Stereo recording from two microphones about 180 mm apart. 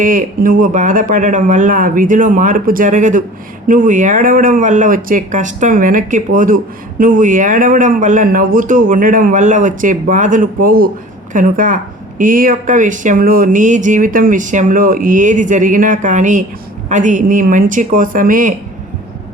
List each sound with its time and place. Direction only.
0.0 s speech: 50° right (ahead or behind)